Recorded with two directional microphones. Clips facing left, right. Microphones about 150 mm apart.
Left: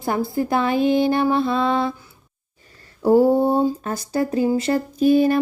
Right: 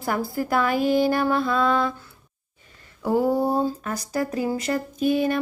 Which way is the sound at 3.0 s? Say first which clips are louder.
Left 6 dB; 30° left (ahead or behind).